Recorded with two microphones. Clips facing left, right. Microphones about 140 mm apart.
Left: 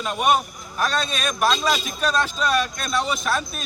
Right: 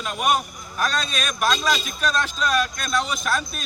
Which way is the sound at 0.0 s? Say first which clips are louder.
Left 2 dB; centre (ahead or behind).